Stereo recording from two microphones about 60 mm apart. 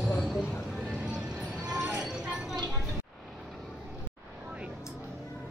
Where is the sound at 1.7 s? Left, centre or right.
Centre.